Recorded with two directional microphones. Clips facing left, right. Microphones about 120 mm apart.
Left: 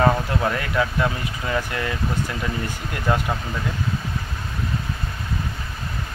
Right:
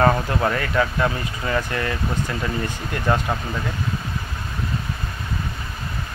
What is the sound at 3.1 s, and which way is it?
Speech, 10° left (ahead or behind).